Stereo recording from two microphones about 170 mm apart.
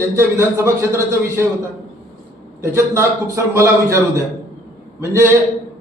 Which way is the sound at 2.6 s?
15° right (ahead or behind).